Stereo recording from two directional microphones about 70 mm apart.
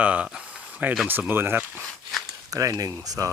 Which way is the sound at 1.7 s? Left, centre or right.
Centre.